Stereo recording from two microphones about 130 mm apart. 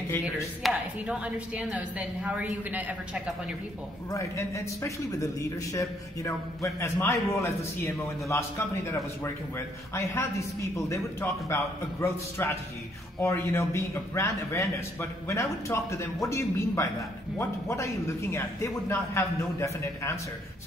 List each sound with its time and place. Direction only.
0.6 s a woman's voice: centre (ahead or behind)
4.1 s a man's voice: 25° left (ahead or behind)
9.9 s a man's voice: 25° left (ahead or behind)